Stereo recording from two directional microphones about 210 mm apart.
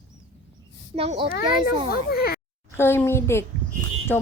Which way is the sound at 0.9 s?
30° right (ahead or behind).